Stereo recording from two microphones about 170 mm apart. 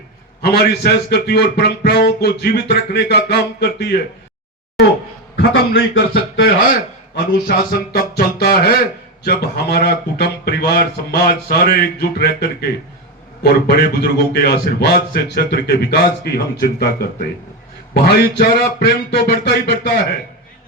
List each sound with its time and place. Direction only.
0.4 s a man's voice: 70° left (ahead or behind)
5.4 s a man's voice: 85° left
7.4 s a man's voice: 60° left (ahead or behind)